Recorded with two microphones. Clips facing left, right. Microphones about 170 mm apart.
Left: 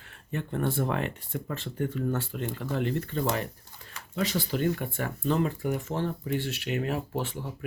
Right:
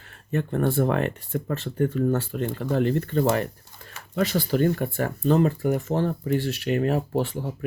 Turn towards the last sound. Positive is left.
turn(degrees=-35)  # may be behind; listen again after turning